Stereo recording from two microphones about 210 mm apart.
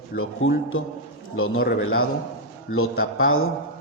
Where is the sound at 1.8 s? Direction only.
80° left.